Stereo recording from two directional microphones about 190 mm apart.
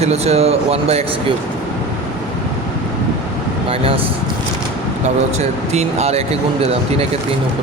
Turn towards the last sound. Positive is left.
turn(degrees=-35)  # may be behind; listen again after turning